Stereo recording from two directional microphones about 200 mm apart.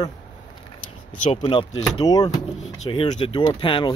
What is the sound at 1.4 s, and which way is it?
Speech, 25° left (ahead or behind).